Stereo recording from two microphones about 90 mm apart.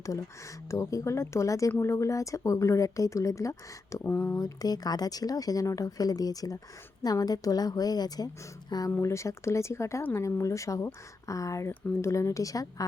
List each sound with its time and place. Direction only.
0.7 s speech: 35° left (ahead or behind)
4.4 s a woman's voice: 45° left (ahead or behind)
9.0 s speech: 35° left (ahead or behind)